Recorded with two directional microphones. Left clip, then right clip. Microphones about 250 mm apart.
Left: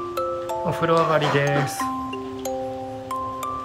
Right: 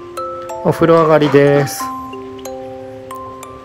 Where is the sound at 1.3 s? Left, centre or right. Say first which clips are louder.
Right 11 dB; right.